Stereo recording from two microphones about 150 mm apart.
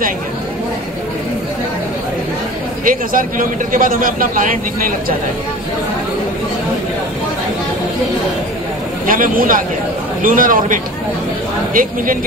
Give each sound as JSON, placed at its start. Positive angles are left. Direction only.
{"t": 2.8, "sound": "a man's voice", "side_deg": -65}
{"t": 9.0, "sound": "a man's voice", "side_deg": -65}